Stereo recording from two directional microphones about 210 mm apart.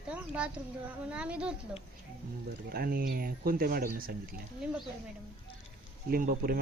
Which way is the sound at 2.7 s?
45° right (ahead or behind).